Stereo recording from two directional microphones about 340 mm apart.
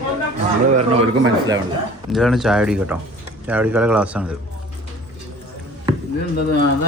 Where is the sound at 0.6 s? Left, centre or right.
Centre.